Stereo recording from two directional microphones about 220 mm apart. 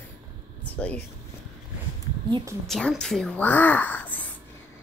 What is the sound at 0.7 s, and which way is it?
Speech, 5° left (ahead or behind).